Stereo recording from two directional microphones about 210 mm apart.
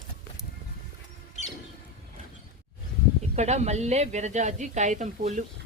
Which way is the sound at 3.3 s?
30° right (ahead or behind).